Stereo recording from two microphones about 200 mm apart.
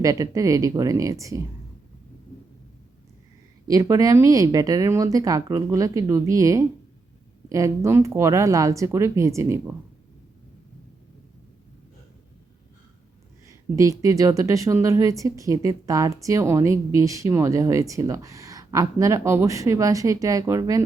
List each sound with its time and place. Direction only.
0.0 s a woman's voice: 15° right (ahead or behind)
3.7 s a woman's voice: 15° right (ahead or behind)
13.7 s a woman's voice: 15° right (ahead or behind)